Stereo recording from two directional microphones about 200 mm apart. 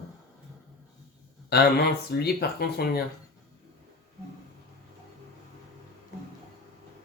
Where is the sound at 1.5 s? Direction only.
55° left (ahead or behind).